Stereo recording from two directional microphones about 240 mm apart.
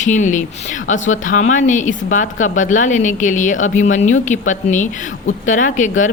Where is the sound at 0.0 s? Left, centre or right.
Left.